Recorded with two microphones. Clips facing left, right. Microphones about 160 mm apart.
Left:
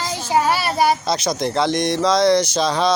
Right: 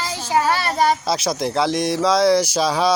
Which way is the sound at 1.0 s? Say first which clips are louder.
Even; 5° right (ahead or behind).